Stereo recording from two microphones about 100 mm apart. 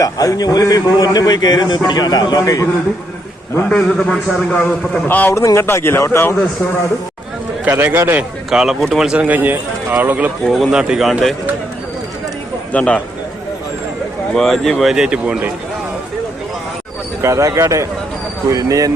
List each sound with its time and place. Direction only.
0.0 s a man's voice: 35° left (ahead or behind)
3.7 s a man's voice: 10° left (ahead or behind)
5.0 s a man's voice: 15° left (ahead or behind)
5.3 s speech: 30° left (ahead or behind)
7.6 s speech: 20° right (ahead or behind)
8.4 s speech: 5° right (ahead or behind)
10.4 s speech: centre (ahead or behind)
12.7 s a man's voice: 10° left (ahead or behind)
14.3 s speech: centre (ahead or behind)
17.2 s speech: 30° right (ahead or behind)